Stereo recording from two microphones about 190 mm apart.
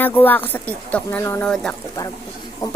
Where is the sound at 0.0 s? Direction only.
10° left (ahead or behind).